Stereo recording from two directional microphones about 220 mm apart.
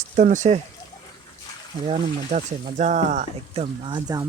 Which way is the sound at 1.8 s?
25° right (ahead or behind).